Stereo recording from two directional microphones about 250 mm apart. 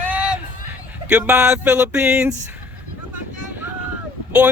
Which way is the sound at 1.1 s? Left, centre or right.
Centre.